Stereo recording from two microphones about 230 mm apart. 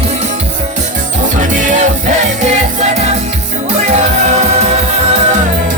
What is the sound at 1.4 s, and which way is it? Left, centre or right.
Music, right.